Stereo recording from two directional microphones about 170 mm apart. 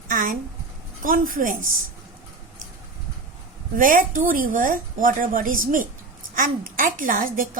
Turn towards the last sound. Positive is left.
turn(degrees=-55)  # may be behind; listen again after turning